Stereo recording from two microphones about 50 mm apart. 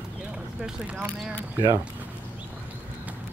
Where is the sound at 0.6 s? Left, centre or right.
Centre.